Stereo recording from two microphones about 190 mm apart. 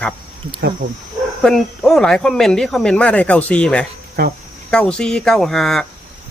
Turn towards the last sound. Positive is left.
turn(degrees=0)  # may be behind; listen again after turning